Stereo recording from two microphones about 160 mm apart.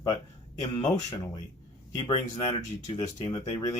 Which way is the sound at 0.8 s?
25° left (ahead or behind).